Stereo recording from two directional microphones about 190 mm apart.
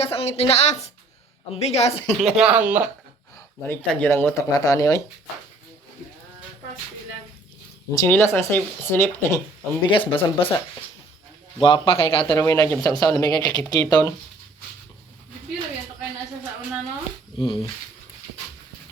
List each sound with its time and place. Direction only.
0.0 s a woman's voice: 30° left (ahead or behind)
2.1 s speech: centre (ahead or behind)
3.3 s speech: 10° left (ahead or behind)
7.9 s speech: 10° left (ahead or behind)
9.8 s speech: 25° left (ahead or behind)
11.6 s speech: 30° left (ahead or behind)
12.4 s speech: 15° left (ahead or behind)
17.3 s speech: 25° left (ahead or behind)